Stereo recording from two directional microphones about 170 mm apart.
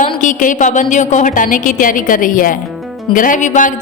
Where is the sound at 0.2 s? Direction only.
50° left (ahead or behind).